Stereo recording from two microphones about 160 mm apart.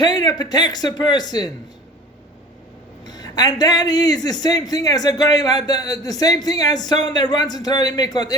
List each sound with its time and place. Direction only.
0.0 s a man's voice: 25° left (ahead or behind)
3.1 s a man's voice: 25° left (ahead or behind)